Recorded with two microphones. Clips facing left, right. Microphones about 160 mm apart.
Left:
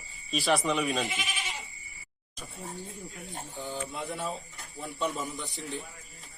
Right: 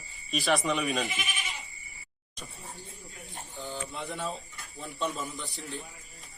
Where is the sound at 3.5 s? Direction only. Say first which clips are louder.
Left 1 dB; 15° left (ahead or behind).